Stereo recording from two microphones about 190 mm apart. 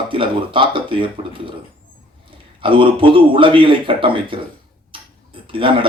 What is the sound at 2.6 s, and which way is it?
Speech, 25° right (ahead or behind).